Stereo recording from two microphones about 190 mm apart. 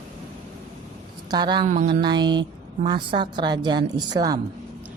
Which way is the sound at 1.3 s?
25° right (ahead or behind).